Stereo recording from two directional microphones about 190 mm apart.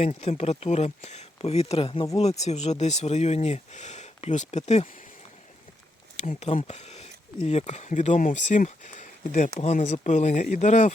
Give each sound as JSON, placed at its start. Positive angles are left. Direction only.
{"t": 0.0, "sound": "speech", "side_deg": 35}
{"t": 6.1, "sound": "speech", "side_deg": 35}